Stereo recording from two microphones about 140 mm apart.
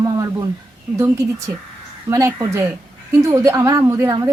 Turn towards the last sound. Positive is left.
turn(degrees=-25)  # may be behind; listen again after turning